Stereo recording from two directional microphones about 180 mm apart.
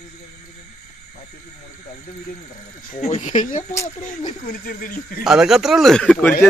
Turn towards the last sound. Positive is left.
turn(degrees=5)  # may be behind; listen again after turning